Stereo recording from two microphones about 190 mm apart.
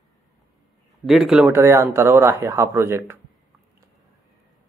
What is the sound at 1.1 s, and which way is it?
Speech, centre (ahead or behind).